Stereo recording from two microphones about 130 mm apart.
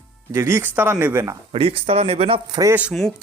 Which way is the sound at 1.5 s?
45° right (ahead or behind).